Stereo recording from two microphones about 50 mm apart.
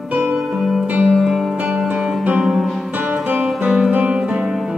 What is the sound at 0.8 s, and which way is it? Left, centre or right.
Music, right.